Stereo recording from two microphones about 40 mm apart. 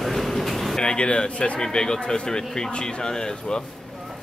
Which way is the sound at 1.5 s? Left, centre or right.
Centre.